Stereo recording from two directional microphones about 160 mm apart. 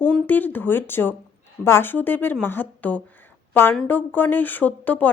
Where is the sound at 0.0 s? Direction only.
10° left (ahead or behind).